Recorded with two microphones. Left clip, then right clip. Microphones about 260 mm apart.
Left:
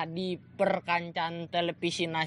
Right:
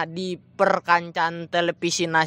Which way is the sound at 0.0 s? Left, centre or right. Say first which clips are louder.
Right 6 dB; right.